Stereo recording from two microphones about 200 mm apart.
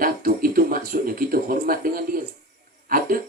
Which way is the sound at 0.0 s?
45° right (ahead or behind).